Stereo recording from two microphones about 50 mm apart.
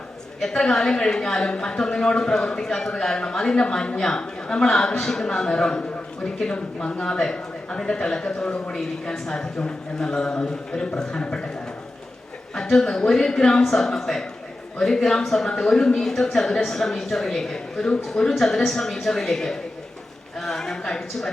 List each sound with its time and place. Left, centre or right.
0.6 s speech: centre
8.4 s a man's voice: left
9.1 s speech: centre
12.5 s speech: centre
20.4 s a sound: centre